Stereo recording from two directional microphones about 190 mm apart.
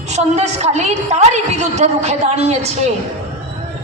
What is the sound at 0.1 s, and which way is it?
A woman's voice, 35° right (ahead or behind).